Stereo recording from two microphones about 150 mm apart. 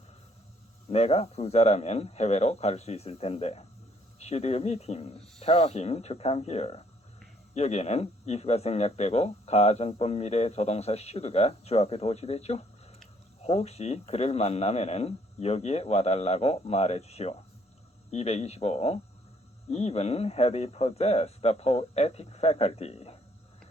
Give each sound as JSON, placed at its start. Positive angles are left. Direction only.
{"t": 0.9, "sound": "speech", "side_deg": 45}